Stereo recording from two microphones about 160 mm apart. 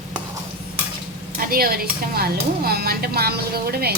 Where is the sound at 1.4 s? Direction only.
65° right (ahead or behind).